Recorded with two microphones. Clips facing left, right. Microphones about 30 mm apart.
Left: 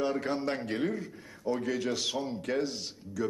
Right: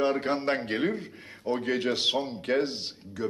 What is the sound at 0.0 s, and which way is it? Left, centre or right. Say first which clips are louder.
A man's voice: right 4 dB; right.